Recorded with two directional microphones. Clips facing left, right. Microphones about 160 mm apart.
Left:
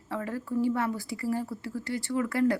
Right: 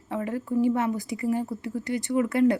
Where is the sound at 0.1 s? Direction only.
20° right (ahead or behind).